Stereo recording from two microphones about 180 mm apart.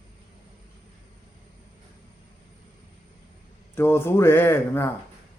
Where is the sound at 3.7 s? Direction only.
10° left (ahead or behind).